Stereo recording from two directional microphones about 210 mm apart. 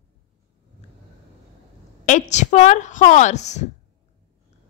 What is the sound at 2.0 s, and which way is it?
A woman's voice, 35° left (ahead or behind).